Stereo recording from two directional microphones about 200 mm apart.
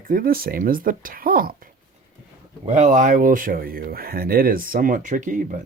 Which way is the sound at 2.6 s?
35° right (ahead or behind).